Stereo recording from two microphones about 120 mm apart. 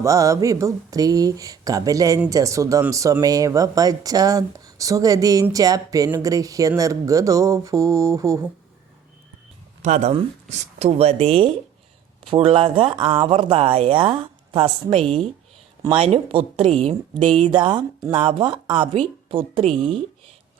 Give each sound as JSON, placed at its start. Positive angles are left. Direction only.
{"t": 0.0, "sound": "speech", "side_deg": -25}
{"t": 9.8, "sound": "speech", "side_deg": -75}
{"t": 10.1, "sound": "speech", "side_deg": -65}
{"t": 17.5, "sound": "speech", "side_deg": -40}